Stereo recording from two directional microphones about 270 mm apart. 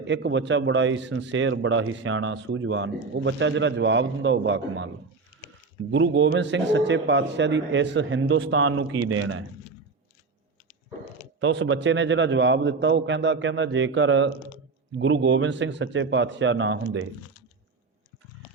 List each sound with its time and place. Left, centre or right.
0.0 s a man's voice: right
5.9 s a man's voice: right
11.3 s a man's voice: right